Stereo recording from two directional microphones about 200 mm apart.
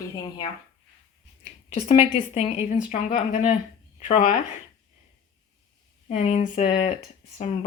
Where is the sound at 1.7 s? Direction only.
30° left (ahead or behind).